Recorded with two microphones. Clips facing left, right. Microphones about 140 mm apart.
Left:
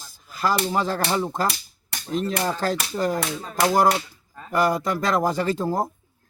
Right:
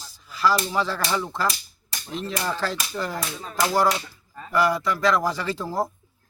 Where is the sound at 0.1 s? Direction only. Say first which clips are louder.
Right 1 dB; 50° left (ahead or behind).